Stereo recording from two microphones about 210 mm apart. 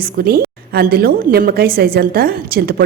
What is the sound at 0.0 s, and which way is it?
A woman's voice, 45° right (ahead or behind).